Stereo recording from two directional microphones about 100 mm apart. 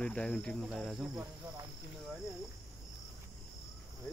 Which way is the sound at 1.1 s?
25° right (ahead or behind).